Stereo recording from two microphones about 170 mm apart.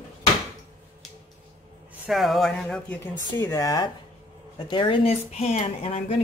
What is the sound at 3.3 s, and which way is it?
Speech, 20° left (ahead or behind).